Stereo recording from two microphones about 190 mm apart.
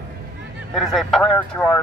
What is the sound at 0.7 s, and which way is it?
Speech, centre (ahead or behind).